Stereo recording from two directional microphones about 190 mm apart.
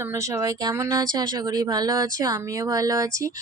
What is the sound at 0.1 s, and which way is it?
Speech, 15° right (ahead or behind).